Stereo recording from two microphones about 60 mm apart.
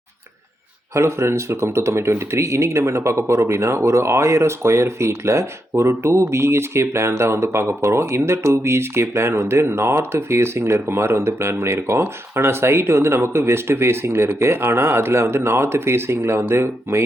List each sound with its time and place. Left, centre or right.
0.9 s speech: right